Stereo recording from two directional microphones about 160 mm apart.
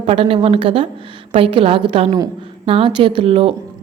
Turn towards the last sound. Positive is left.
turn(degrees=-35)  # may be behind; listen again after turning